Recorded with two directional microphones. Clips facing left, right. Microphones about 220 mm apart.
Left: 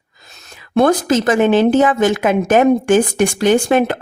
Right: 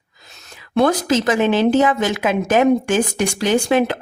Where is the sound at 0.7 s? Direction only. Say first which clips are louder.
Left 3 dB; 50° left (ahead or behind).